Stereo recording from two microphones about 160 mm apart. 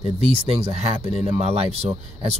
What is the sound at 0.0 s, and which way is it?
Speech, 35° right (ahead or behind).